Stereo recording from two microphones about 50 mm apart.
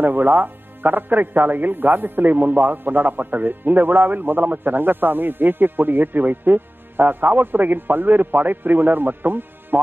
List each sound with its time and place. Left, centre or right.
0.0 s speech: right